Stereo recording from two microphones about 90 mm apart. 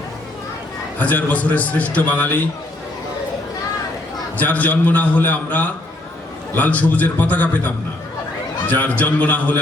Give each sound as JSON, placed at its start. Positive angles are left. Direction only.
{"t": 0.9, "sound": "a man's voice", "side_deg": 20}
{"t": 4.4, "sound": "a man's voice", "side_deg": 20}